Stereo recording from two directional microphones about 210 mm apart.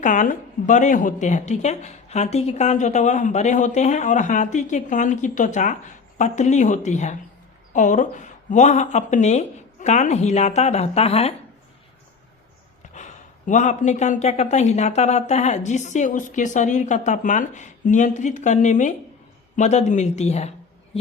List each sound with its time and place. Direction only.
0.0 s speech: 40° left (ahead or behind)
12.9 s speech: 35° left (ahead or behind)